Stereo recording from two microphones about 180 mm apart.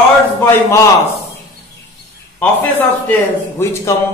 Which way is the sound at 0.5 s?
15° left (ahead or behind).